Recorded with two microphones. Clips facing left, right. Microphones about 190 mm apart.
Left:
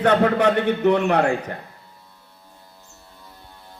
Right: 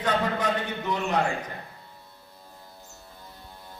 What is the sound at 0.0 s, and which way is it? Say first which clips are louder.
A man's voice: left 9 dB; 65° left (ahead or behind).